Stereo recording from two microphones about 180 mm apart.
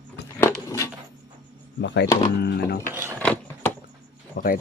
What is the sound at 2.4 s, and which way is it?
Speech, 65° left (ahead or behind).